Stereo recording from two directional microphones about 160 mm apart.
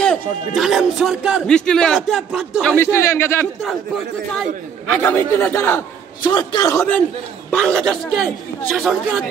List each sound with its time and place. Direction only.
0.6 s a man's voice: centre (ahead or behind)
2.7 s a man's voice: 15° left (ahead or behind)
3.6 s a man's voice: centre (ahead or behind)
4.8 s a man's voice: 10° left (ahead or behind)
6.2 s a man's voice: 30° left (ahead or behind)
7.5 s a man's voice: 5° left (ahead or behind)